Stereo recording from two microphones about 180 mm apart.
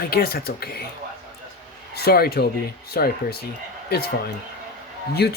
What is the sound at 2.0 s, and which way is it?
Speech, 60° left (ahead or behind).